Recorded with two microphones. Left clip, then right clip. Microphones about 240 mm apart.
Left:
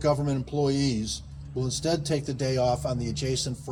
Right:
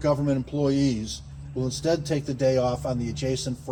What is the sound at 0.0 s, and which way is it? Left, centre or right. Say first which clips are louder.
Speech: right 2 dB; left.